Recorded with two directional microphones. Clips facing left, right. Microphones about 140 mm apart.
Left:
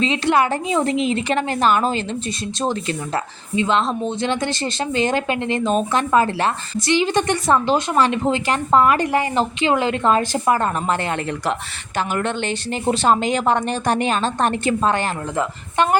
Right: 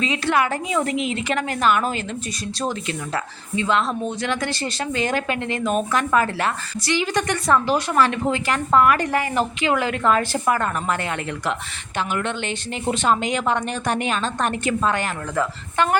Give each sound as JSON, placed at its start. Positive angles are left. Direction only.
{"t": 0.0, "sound": "speech", "side_deg": 25}
{"t": 3.5, "sound": "speech", "side_deg": 20}
{"t": 11.9, "sound": "a woman's voice", "side_deg": 40}